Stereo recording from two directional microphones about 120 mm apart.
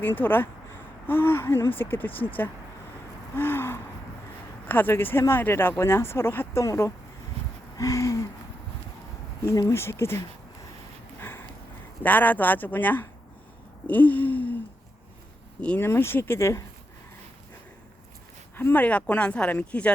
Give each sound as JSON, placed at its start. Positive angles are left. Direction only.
{"t": 0.0, "sound": "speech", "side_deg": 15}
{"t": 7.8, "sound": "a sound", "side_deg": 25}
{"t": 9.4, "sound": "speech", "side_deg": 25}
{"t": 11.2, "sound": "sniff", "side_deg": 20}
{"t": 12.0, "sound": "speech", "side_deg": 15}
{"t": 13.8, "sound": "a sound", "side_deg": 15}
{"t": 15.6, "sound": "speech", "side_deg": 15}
{"t": 18.5, "sound": "speech", "side_deg": 15}